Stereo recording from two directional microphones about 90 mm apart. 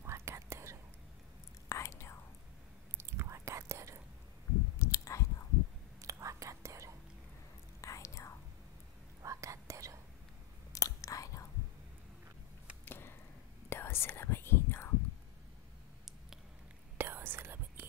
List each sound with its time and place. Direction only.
0.0 s whispering: 30° right (ahead or behind)
1.7 s whispering: 30° left (ahead or behind)
3.0 s whispering: 30° right (ahead or behind)
4.7 s a sound: 35° left (ahead or behind)
5.9 s whispering: 35° right (ahead or behind)
7.8 s whispering: 35° left (ahead or behind)
9.2 s whispering: 35° right (ahead or behind)
10.7 s whispering: 40° left (ahead or behind)
12.8 s a sound: 25° left (ahead or behind)
13.7 s whispering: 25° left (ahead or behind)
17.0 s whispering: 25° right (ahead or behind)